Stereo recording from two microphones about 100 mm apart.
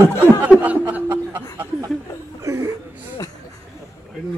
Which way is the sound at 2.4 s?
25° right (ahead or behind).